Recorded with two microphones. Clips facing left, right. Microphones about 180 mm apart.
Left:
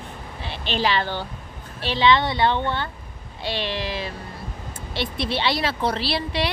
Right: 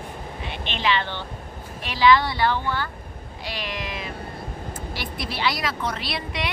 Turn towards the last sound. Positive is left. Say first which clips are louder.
# left 5 dB
turn(degrees=30)  # may be behind; listen again after turning